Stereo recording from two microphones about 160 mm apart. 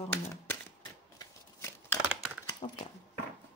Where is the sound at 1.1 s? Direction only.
20° left (ahead or behind).